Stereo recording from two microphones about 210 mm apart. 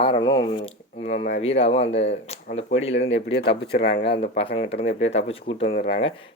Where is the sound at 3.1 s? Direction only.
60° left (ahead or behind).